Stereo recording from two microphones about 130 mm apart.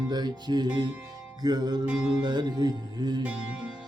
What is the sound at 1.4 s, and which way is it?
Mantra, 30° right (ahead or behind).